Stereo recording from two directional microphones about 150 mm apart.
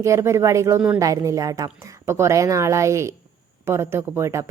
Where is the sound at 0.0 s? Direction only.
20° right (ahead or behind).